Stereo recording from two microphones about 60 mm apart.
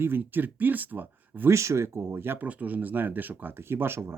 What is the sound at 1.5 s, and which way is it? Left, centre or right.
Speech, right.